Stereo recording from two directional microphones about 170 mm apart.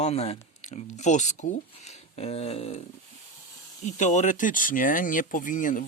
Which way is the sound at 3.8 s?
45° left (ahead or behind).